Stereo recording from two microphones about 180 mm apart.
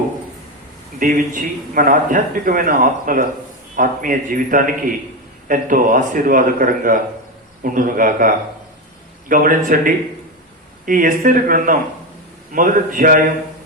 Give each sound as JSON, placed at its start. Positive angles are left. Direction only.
{"t": 0.9, "sound": "a man's voice", "side_deg": -45}
{"t": 9.3, "sound": "a man's voice", "side_deg": -50}